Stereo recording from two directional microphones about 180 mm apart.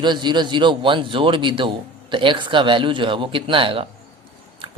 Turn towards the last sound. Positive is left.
turn(degrees=-30)  # may be behind; listen again after turning